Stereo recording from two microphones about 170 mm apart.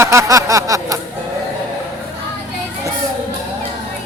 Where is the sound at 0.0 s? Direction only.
15° right (ahead or behind).